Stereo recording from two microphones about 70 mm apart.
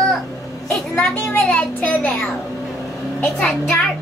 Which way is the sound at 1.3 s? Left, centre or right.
Left.